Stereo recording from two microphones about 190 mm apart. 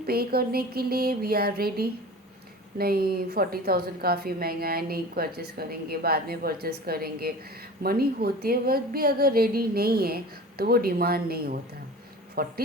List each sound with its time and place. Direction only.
0.0 s a woman's voice: 55° right (ahead or behind)